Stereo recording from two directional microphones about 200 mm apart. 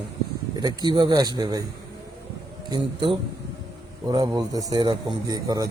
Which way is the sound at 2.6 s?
25° right (ahead or behind).